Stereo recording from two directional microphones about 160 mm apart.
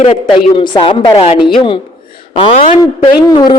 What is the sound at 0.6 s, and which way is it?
A woman's voice, 30° left (ahead or behind).